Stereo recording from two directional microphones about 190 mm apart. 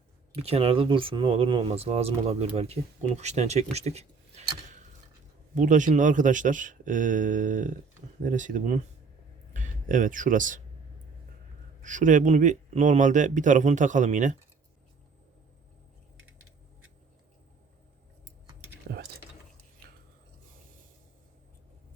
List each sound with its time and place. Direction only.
0.4 s a man's voice: 30° right (ahead or behind)
5.5 s a man's voice: 40° right (ahead or behind)
11.8 s a man's voice: 40° right (ahead or behind)
18.9 s a sound: 60° right (ahead or behind)